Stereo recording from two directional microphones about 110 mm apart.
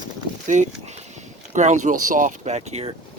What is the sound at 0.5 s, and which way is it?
Speech, 90° right.